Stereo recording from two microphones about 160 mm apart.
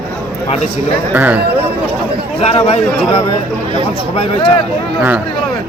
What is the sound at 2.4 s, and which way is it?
Speech, 40° left (ahead or behind).